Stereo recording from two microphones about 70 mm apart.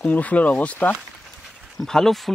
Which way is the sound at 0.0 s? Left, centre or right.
Left.